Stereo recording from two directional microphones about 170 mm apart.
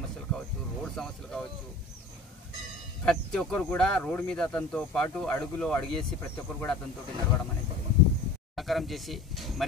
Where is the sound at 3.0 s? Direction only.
Centre (ahead or behind).